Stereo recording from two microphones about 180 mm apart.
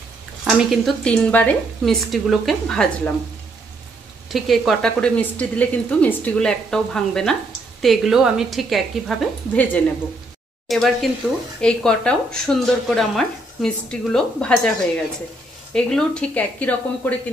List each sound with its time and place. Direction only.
0.5 s speech: centre (ahead or behind)
4.3 s speech: centre (ahead or behind)
15.7 s speech: 5° left (ahead or behind)